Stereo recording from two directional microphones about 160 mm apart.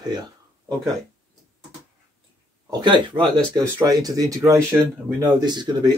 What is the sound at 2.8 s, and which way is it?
Speech, 30° right (ahead or behind).